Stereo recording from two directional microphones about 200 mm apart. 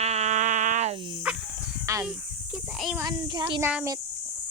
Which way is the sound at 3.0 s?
20° right (ahead or behind).